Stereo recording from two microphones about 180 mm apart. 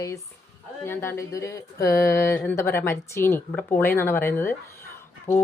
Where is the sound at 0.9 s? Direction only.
15° left (ahead or behind).